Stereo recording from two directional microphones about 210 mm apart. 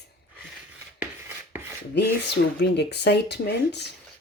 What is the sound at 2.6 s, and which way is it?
Speech, 50° left (ahead or behind).